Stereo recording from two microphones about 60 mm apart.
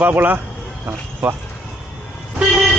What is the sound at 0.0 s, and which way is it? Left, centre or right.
Speech, right.